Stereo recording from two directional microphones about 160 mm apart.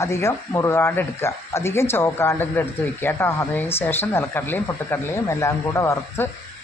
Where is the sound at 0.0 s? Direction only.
15° left (ahead or behind).